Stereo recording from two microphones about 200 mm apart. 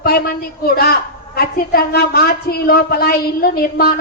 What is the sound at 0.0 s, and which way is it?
A woman's voice, 50° left (ahead or behind).